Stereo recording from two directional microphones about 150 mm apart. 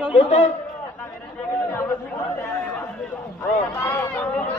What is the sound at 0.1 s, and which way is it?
Speech, 40° left (ahead or behind).